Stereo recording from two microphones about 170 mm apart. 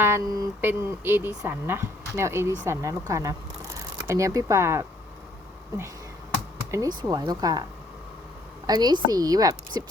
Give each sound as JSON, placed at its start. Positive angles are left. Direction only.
{"t": 0.0, "sound": "speech", "side_deg": -20}
{"t": 6.7, "sound": "a woman's voice", "side_deg": -20}